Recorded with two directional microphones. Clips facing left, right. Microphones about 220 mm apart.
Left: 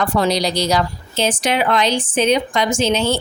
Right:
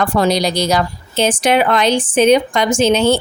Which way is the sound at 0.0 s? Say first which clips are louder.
Right 3 dB; 50° right (ahead or behind).